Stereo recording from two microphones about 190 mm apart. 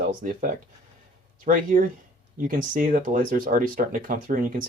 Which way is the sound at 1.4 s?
45° right (ahead or behind).